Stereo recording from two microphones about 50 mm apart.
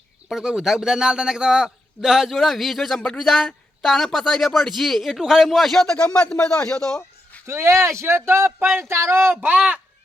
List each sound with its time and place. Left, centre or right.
0.3 s a man's voice: centre
7.4 s speech: right
9.4 s speech: right